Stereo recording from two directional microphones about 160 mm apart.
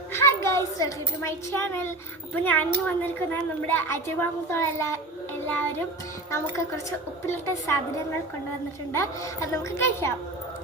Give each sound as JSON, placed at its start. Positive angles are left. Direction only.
{"t": 0.1, "sound": "a child's voice", "side_deg": 15}
{"t": 7.3, "sound": "speech", "side_deg": 15}
{"t": 8.9, "sound": "speech", "side_deg": 20}